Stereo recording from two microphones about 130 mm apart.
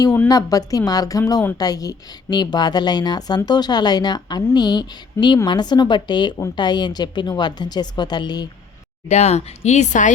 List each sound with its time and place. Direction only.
0.3 s a woman's voice: 30° left (ahead or behind)
5.2 s a woman's voice: 20° left (ahead or behind)
5.5 s a woman's voice: 35° left (ahead or behind)
9.0 s speech: 60° left (ahead or behind)